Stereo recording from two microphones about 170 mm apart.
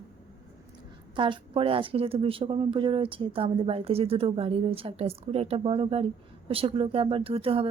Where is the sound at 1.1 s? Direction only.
30° right (ahead or behind).